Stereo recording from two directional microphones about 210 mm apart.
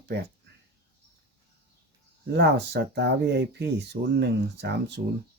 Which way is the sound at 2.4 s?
55° right (ahead or behind).